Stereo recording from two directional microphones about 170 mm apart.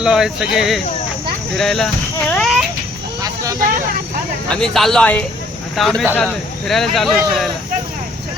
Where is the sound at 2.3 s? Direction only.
Centre (ahead or behind).